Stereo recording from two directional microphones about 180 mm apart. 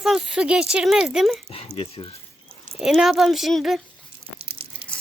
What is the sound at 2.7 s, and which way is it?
Speech, 5° right (ahead or behind).